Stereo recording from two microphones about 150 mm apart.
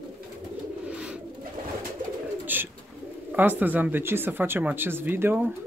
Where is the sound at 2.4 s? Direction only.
15° right (ahead or behind).